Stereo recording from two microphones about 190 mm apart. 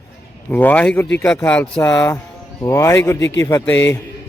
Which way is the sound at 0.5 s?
10° left (ahead or behind).